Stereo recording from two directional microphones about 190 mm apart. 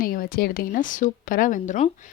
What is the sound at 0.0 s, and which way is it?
A woman's voice, 50° left (ahead or behind).